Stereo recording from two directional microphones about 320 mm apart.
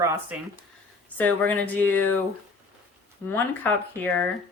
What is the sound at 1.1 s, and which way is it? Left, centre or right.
Speech, centre.